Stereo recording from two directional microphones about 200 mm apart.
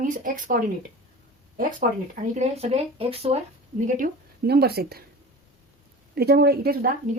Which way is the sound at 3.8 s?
45° right (ahead or behind).